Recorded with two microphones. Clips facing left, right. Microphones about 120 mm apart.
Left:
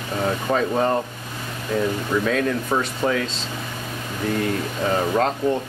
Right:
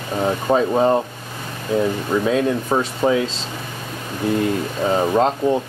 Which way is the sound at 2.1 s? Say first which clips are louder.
Right 3 dB; 20° right (ahead or behind).